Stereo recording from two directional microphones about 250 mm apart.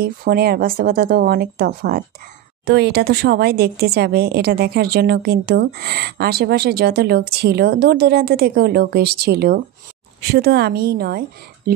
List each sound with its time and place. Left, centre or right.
0.0 s speech: right